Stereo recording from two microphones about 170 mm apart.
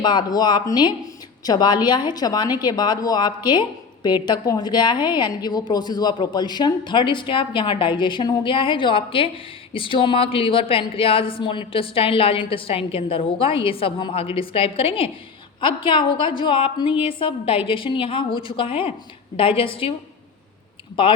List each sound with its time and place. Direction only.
0.0 s a woman's voice: 25° left (ahead or behind)